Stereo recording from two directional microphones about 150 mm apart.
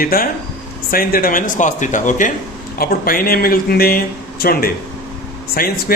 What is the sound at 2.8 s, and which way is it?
A man's voice, 75° left (ahead or behind).